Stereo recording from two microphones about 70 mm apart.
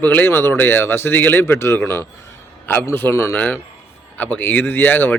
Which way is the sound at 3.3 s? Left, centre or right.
Left.